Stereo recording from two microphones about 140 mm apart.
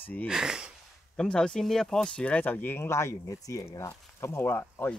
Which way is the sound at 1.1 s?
5° left (ahead or behind).